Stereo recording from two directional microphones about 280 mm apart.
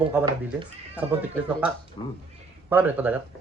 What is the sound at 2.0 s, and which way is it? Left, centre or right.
Speech, centre.